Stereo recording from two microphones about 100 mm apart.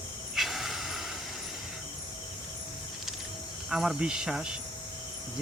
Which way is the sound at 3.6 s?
5° right (ahead or behind).